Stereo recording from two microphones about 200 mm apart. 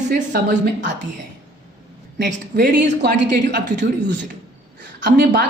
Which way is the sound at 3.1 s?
60° right (ahead or behind).